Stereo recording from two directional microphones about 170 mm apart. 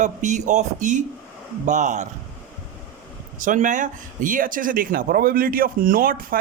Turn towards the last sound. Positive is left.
turn(degrees=-60)  # may be behind; listen again after turning